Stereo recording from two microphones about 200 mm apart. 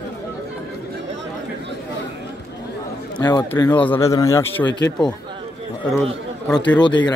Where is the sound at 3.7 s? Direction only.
10° left (ahead or behind).